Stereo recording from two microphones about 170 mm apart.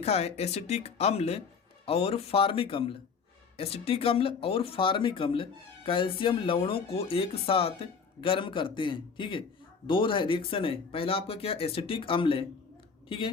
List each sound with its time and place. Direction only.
0.0 s speech: 35° left (ahead or behind)